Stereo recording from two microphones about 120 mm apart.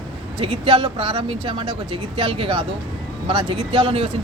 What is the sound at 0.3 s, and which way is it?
Speech, 50° right (ahead or behind).